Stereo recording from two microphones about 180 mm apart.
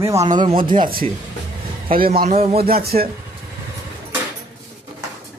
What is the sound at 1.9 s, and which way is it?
Speech, 55° right (ahead or behind).